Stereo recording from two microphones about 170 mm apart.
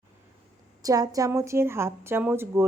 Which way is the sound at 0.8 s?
20° right (ahead or behind).